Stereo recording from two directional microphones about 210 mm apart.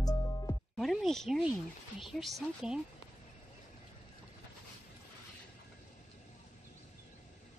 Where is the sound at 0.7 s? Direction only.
Centre (ahead or behind).